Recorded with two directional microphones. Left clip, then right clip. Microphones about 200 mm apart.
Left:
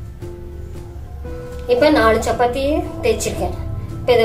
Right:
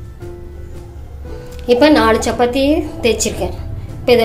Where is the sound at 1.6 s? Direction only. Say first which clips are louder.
Right 3 dB; 45° right (ahead or behind).